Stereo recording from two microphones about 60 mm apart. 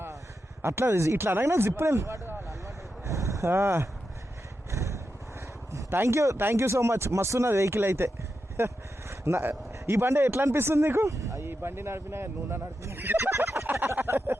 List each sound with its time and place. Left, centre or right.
0.6 s speech: right
2.5 s vehicle: right
3.5 s speech: right
4.7 s vehicle: right
5.9 s speech: right
11.4 s speech: right
13.1 s fowl: right